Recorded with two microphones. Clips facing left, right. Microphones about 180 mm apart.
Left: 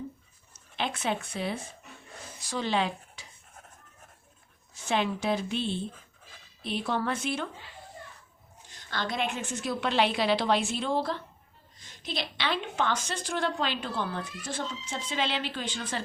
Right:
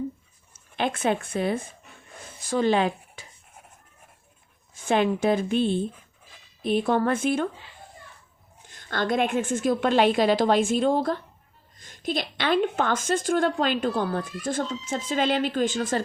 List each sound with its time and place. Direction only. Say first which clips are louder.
0.5 s speech: right 6 dB; 50° right (ahead or behind)
4.7 s a woman's voice: right 6 dB; 50° right (ahead or behind)
8.6 s a woman's voice: right 7 dB; 50° right (ahead or behind)